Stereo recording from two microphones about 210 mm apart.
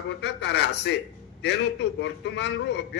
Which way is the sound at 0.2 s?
55° left (ahead or behind).